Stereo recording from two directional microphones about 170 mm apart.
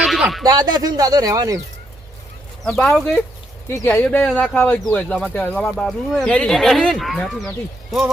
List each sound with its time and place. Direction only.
0.0 s a sound: centre (ahead or behind)
0.4 s speech: 25° right (ahead or behind)
2.6 s speech: 5° left (ahead or behind)